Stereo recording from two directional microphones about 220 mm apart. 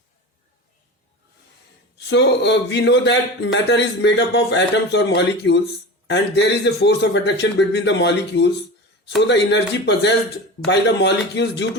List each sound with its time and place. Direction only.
2.0 s a man's voice: 50° left (ahead or behind)